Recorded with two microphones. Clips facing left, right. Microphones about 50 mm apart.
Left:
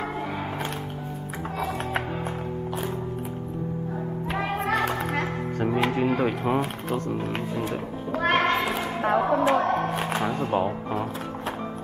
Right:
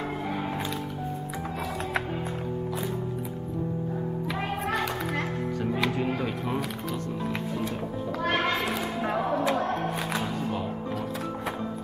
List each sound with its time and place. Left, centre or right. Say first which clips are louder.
1.4 s music: left 6 dB; left
4.4 s a sound: left 5 dB; left
5.2 s speech: left 3 dB; left